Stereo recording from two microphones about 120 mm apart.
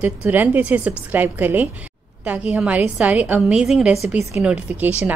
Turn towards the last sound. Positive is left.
turn(degrees=-10)  # may be behind; listen again after turning